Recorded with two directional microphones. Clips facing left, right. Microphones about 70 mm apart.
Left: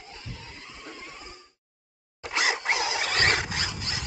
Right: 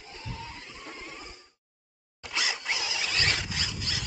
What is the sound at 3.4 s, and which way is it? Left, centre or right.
Zipper, left.